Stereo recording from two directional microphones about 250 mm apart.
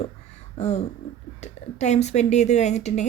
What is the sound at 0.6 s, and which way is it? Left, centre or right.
Speech, left.